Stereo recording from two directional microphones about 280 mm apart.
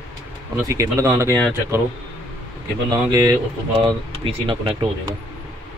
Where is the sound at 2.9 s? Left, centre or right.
Centre.